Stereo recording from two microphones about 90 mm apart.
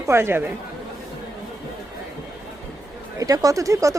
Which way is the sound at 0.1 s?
25° right (ahead or behind).